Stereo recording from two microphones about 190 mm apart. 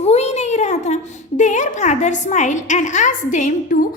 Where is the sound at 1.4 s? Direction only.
40° left (ahead or behind).